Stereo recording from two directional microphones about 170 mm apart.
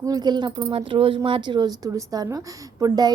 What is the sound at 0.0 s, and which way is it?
A woman's voice, 25° right (ahead or behind).